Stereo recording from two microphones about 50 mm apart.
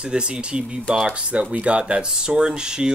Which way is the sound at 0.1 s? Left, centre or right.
Centre.